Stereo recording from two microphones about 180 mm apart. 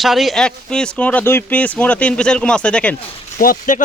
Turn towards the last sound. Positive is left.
turn(degrees=50)  # may be behind; listen again after turning